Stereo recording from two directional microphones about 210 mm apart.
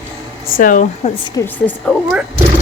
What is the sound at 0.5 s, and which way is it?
Speech, 40° left (ahead or behind).